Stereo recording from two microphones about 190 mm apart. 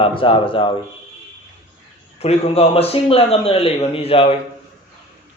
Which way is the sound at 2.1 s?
30° left (ahead or behind).